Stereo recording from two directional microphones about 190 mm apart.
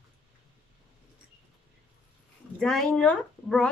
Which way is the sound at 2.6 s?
5° left (ahead or behind).